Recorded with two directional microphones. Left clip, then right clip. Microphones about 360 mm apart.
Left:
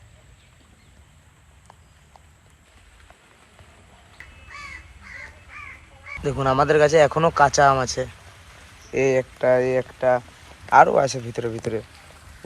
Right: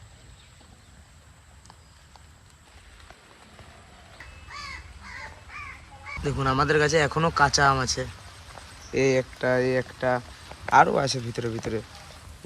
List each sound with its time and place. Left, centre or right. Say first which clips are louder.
6.2 s speech: left 5 dB; centre